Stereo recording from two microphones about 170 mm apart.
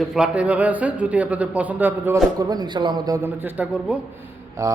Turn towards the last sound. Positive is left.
turn(degrees=-15)  # may be behind; listen again after turning